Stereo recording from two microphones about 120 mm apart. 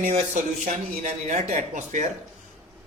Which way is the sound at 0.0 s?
80° right.